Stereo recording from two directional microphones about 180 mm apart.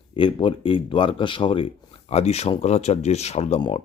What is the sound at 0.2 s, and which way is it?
Speech, 25° left (ahead or behind).